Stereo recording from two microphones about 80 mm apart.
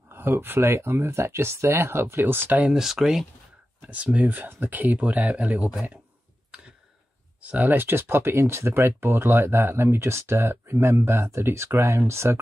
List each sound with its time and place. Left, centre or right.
0.1 s speech: right
2.7 s speech: centre
3.8 s speech: centre
7.4 s speech: right